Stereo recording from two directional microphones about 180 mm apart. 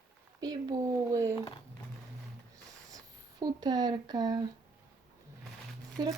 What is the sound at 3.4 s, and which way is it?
Speech, 20° right (ahead or behind).